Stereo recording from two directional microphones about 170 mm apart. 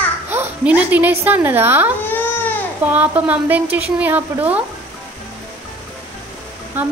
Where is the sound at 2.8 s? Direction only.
10° right (ahead or behind).